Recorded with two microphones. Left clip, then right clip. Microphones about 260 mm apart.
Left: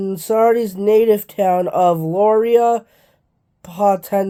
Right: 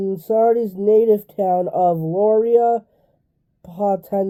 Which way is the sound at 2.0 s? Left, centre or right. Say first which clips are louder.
Left 2 dB; left.